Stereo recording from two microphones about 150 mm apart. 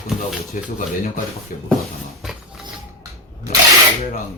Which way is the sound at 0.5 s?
60° left (ahead or behind).